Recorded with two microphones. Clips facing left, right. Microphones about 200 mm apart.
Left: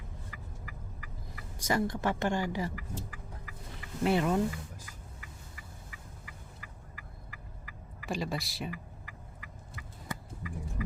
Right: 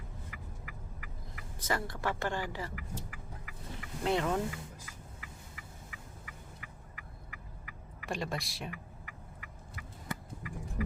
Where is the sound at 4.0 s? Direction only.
10° left (ahead or behind).